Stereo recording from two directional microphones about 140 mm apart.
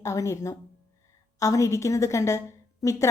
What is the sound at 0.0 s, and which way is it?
A woman's voice, 20° left (ahead or behind).